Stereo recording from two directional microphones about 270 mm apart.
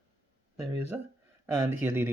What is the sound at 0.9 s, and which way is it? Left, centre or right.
Speech, centre.